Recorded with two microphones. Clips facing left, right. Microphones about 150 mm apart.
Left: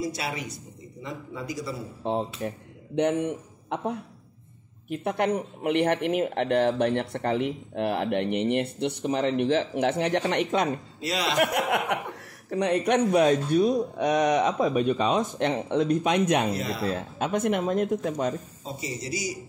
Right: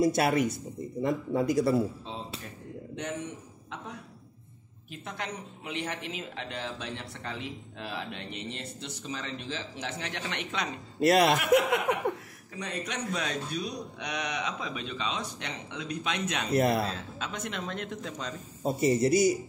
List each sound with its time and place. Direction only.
0.0 s a man's voice: 55° right (ahead or behind)
2.0 s a man's voice: 60° left (ahead or behind)
11.0 s a man's voice: 55° right (ahead or behind)
11.3 s speech: 55° left (ahead or behind)
16.5 s a man's voice: 55° right (ahead or behind)
16.8 s speech: 55° left (ahead or behind)
17.6 s speech: 40° left (ahead or behind)
18.6 s a man's voice: 55° right (ahead or behind)